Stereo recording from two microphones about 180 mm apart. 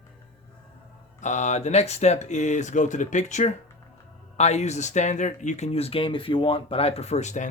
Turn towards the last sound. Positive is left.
turn(degrees=40)  # may be behind; listen again after turning